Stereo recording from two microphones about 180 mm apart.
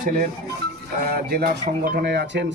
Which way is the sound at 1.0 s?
60° right (ahead or behind).